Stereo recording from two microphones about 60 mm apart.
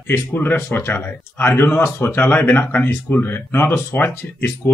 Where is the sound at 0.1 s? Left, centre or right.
Left.